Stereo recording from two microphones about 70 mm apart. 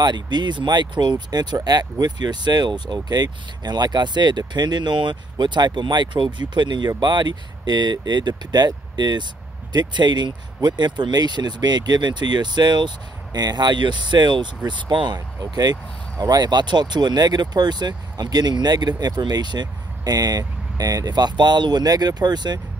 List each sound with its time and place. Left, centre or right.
0.0 s speech: right